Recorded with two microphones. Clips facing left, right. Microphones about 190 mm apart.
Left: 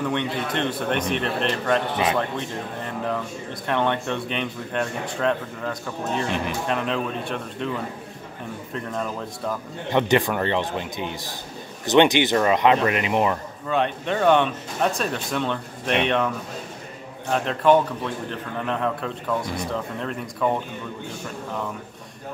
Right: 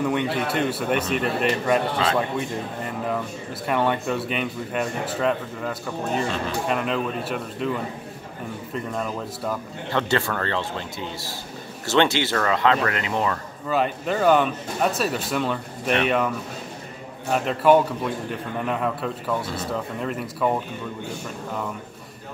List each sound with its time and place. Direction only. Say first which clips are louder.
0.0 s speech: right 2 dB; 10° right (ahead or behind)
6.2 s a man's voice: left 1 dB; 15° left (ahead or behind)
6.7 s speech: right 1 dB; 5° right (ahead or behind)
8.7 s speech: right 1 dB; centre (ahead or behind)
9.8 s a man's voice: left 4 dB; 15° left (ahead or behind)
13.7 s speech: even; 5° right (ahead or behind)
17.3 s speech: right 1 dB; 5° right (ahead or behind)
19.4 s a man's voice: left 1 dB; 15° left (ahead or behind)
19.7 s speech: right 1 dB; 5° right (ahead or behind)